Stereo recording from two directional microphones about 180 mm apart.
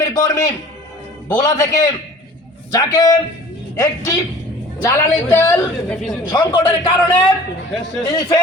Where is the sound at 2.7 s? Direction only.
20° left (ahead or behind).